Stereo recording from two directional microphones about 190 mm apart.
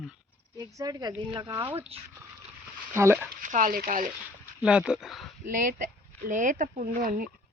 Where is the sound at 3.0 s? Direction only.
10° right (ahead or behind).